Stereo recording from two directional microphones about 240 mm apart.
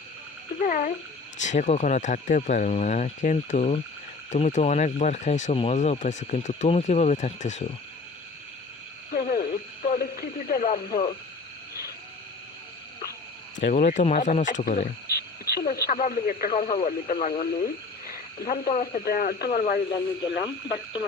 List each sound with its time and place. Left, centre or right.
0.6 s speech: left
9.1 s frog: left
13.6 s speech: left
20.4 s speech: left